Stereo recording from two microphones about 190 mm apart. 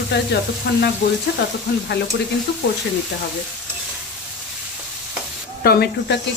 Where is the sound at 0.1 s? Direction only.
60° left (ahead or behind).